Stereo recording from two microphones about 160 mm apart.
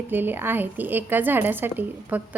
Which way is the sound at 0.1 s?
10° right (ahead or behind).